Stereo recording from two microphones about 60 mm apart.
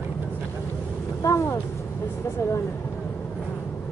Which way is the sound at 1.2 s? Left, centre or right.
Left.